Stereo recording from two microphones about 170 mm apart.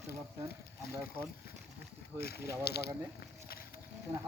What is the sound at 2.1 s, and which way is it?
Speech, 70° left (ahead or behind).